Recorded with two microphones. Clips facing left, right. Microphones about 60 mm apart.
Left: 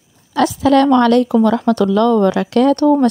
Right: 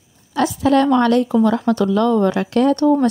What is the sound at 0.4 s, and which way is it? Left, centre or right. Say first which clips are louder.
A woman's voice: left 3 dB; left.